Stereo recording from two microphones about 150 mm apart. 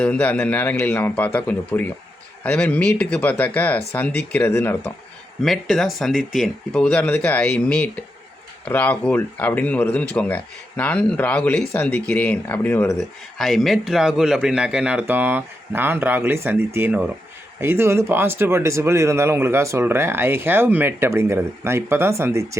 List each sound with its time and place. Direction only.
0.0 s speech: 10° left (ahead or behind)
5.4 s speech: centre (ahead or behind)
13.0 s speech: centre (ahead or behind); by 22.4 s 20° right (ahead or behind)